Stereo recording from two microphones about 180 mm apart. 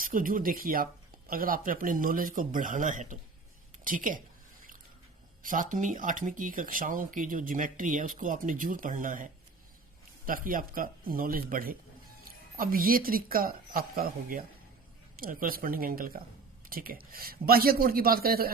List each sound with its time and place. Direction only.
0.0 s speech: 50° right (ahead or behind)
5.4 s speech: 45° right (ahead or behind)